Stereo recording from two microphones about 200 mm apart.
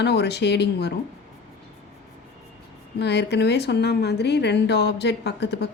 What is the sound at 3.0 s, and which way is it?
Speech, 60° left (ahead or behind).